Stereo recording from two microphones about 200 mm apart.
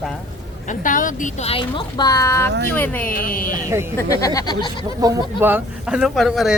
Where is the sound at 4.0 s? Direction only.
15° left (ahead or behind).